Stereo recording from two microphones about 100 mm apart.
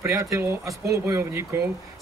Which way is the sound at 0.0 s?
30° right (ahead or behind).